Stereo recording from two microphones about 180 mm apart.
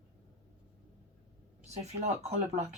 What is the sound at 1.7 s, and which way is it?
Speech, 35° right (ahead or behind).